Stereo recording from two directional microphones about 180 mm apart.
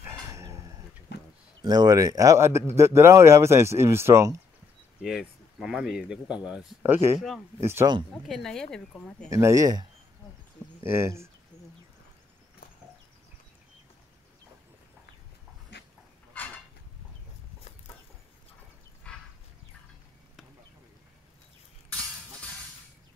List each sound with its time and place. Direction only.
0.0 s a sound: 15° right (ahead or behind)
1.1 s a sound: 70° left (ahead or behind)
1.6 s speech: 20° right (ahead or behind)
5.0 s speech: centre (ahead or behind)
8.1 s speech: centre (ahead or behind)
9.3 s speech: 15° right (ahead or behind)
15.7 s dog: 70° left (ahead or behind)